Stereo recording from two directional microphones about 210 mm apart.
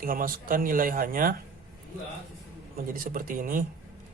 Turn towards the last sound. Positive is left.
turn(degrees=-40)  # may be behind; listen again after turning